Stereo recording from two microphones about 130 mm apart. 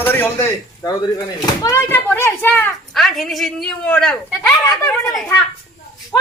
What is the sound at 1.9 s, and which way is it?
Speech, 15° left (ahead or behind).